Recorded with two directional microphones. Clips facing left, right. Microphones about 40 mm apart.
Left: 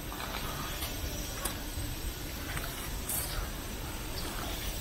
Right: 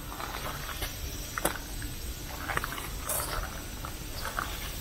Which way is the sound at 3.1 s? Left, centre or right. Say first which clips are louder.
Right 9 dB; right.